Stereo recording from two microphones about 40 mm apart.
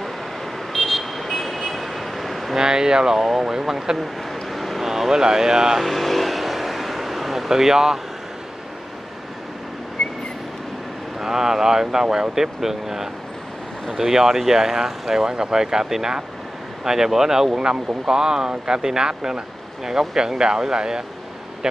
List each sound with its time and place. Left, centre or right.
0.7 s vehicle: centre
2.5 s speech: centre
4.0 s speech: centre
5.8 s vehicle: centre
10.0 s vehicle: centre
11.1 s speech: centre